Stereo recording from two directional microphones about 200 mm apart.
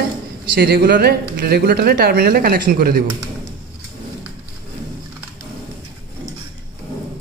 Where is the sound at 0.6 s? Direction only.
50° right (ahead or behind).